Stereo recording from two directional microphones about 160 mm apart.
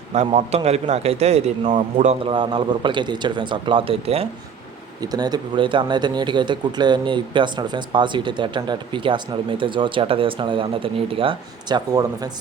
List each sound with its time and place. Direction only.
0.3 s a man's voice: 40° right (ahead or behind)
2.2 s a man's voice: 30° right (ahead or behind)
4.9 s speech: 25° right (ahead or behind)